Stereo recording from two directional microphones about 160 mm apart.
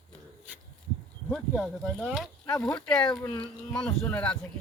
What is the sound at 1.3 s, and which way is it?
Speech, centre (ahead or behind).